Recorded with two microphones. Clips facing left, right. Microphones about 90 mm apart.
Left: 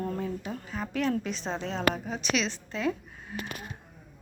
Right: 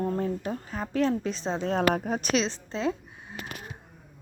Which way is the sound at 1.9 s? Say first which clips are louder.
Right 4 dB; 50° right (ahead or behind).